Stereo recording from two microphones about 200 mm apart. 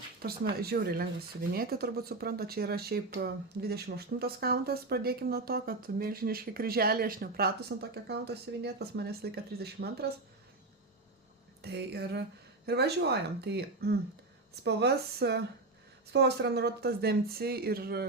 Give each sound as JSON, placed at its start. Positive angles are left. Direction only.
{"t": 0.2, "sound": "speech", "side_deg": -50}
{"t": 11.6, "sound": "speech", "side_deg": -55}